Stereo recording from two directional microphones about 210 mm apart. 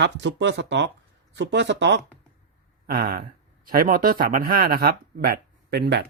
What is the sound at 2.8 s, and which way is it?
Speech, 45° right (ahead or behind).